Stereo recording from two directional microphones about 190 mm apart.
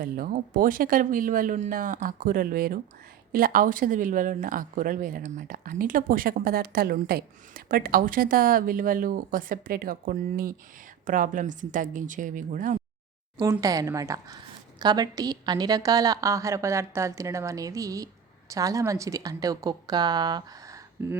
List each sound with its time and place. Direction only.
0.0 s a woman's voice: 50° right (ahead or behind)
13.4 s a woman's voice: 20° right (ahead or behind)